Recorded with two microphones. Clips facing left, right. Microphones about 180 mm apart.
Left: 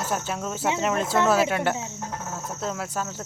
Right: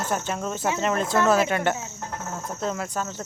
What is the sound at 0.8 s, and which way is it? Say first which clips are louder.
Cricket: right 1 dB; 5° left (ahead or behind).